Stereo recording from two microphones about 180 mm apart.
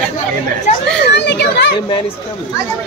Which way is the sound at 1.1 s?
70° left (ahead or behind).